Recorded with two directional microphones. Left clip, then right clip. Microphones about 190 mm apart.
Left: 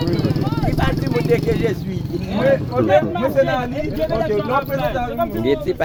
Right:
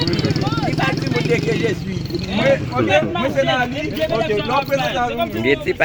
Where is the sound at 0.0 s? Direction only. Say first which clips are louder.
Right 1 dB; 65° left (ahead or behind).